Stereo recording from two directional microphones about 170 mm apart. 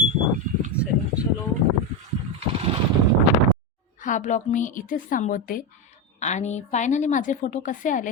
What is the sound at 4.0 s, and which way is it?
A woman's voice, 45° left (ahead or behind).